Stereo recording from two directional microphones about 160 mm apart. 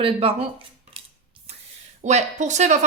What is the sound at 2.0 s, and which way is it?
Speech, 45° right (ahead or behind).